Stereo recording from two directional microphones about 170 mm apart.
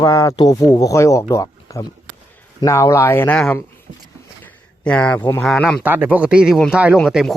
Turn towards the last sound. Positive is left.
turn(degrees=0)  # may be behind; listen again after turning